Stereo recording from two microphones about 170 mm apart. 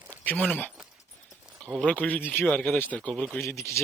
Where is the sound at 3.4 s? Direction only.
15° left (ahead or behind).